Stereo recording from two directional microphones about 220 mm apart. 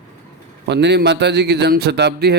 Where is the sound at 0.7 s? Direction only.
50° right (ahead or behind).